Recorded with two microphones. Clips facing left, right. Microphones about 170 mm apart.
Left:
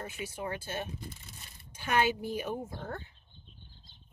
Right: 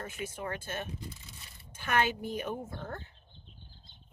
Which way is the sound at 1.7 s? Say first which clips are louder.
Left 1 dB; 50° right (ahead or behind).